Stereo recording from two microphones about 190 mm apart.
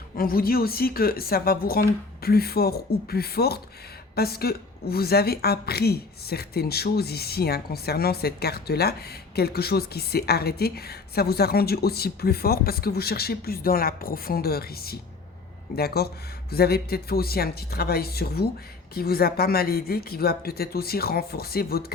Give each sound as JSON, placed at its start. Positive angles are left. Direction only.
{"t": 0.2, "sound": "a woman's voice", "side_deg": 50}